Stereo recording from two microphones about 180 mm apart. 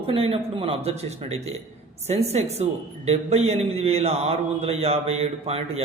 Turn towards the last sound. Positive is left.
turn(degrees=-35)  # may be behind; listen again after turning